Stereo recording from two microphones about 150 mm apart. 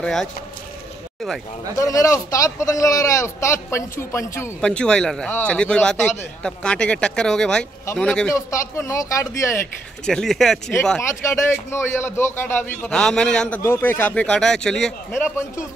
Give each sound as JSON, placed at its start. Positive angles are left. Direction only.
{"t": 0.0, "sound": "speech", "side_deg": 5}
{"t": 1.8, "sound": "a man's voice", "side_deg": 20}
{"t": 4.6, "sound": "a man's voice", "side_deg": 5}
{"t": 8.3, "sound": "a man's voice", "side_deg": 20}
{"t": 10.0, "sound": "speech", "side_deg": 5}
{"t": 11.0, "sound": "a man's voice", "side_deg": 20}